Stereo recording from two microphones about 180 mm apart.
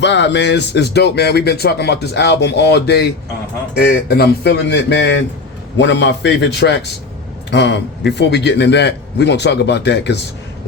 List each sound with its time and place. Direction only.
0.0 s speech: 80° left